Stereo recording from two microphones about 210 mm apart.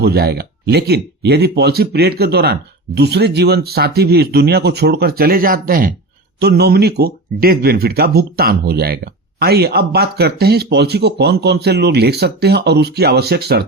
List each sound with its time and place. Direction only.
0.0 s speech: 50° right (ahead or behind)